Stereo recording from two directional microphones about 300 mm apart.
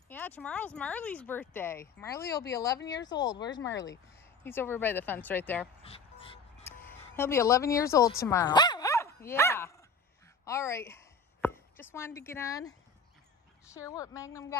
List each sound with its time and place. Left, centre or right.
0.1 s speech: centre
5.9 s dog: centre
6.8 s speech: centre
8.1 s dog: centre
10.4 s a sound: centre
13.7 s speech: centre